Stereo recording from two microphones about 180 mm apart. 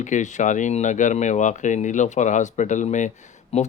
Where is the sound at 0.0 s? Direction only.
40° left (ahead or behind).